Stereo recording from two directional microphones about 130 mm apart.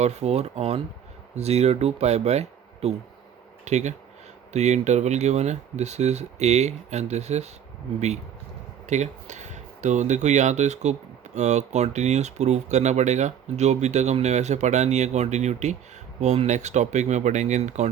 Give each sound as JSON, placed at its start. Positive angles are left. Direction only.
{"t": 0.0, "sound": "speech", "side_deg": -55}
{"t": 8.9, "sound": "speech", "side_deg": -65}